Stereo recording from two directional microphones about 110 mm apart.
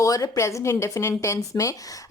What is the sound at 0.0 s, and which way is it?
Speech, 30° left (ahead or behind).